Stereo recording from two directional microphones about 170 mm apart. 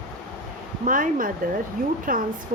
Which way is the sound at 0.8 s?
55° right (ahead or behind).